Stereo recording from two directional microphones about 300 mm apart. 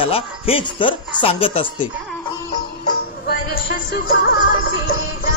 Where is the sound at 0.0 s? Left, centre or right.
Centre.